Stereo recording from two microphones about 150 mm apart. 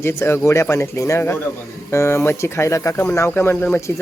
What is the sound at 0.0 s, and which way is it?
Speech, 15° left (ahead or behind).